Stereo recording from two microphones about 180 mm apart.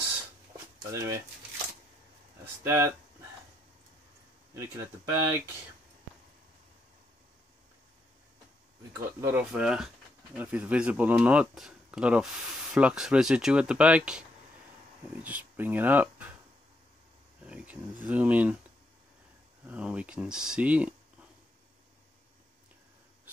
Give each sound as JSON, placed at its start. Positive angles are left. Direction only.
{"t": 0.9, "sound": "speech", "side_deg": -15}
{"t": 2.4, "sound": "speech", "side_deg": -15}
{"t": 4.6, "sound": "speech", "side_deg": -15}
{"t": 9.2, "sound": "speech", "side_deg": -10}
{"t": 15.2, "sound": "speech", "side_deg": -10}
{"t": 17.5, "sound": "speech", "side_deg": -10}
{"t": 19.6, "sound": "speech", "side_deg": -5}